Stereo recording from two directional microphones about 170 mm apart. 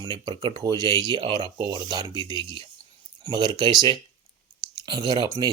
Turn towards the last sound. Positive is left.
turn(degrees=-25)  # may be behind; listen again after turning